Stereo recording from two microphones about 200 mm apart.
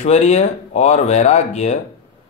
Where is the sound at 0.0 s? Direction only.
35° left (ahead or behind).